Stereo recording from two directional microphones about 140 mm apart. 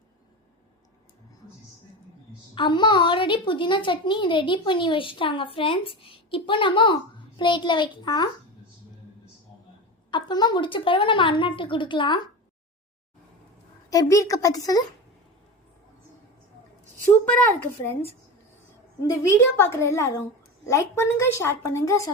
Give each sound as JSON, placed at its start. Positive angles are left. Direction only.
{"t": 2.6, "sound": "a woman's voice", "side_deg": 35}
{"t": 10.1, "sound": "a woman's voice", "side_deg": 35}
{"t": 13.9, "sound": "a woman's voice", "side_deg": 25}
{"t": 17.3, "sound": "a woman's voice", "side_deg": 10}